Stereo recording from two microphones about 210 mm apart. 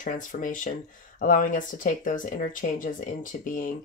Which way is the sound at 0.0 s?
40° left (ahead or behind).